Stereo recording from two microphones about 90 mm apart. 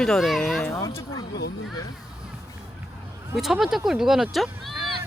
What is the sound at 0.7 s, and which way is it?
Speech, 35° left (ahead or behind).